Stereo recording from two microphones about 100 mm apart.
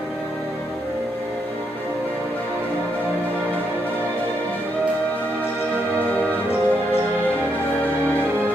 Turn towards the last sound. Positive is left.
turn(degrees=20)  # may be behind; listen again after turning